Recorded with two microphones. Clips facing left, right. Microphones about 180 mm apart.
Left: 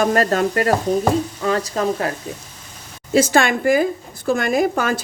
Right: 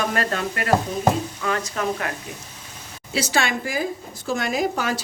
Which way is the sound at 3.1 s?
50° left (ahead or behind).